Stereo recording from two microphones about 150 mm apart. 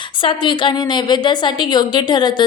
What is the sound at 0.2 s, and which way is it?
A woman's voice, 35° left (ahead or behind).